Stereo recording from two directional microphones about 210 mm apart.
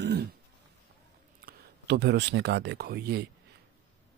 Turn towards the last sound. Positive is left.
turn(degrees=-50)  # may be behind; listen again after turning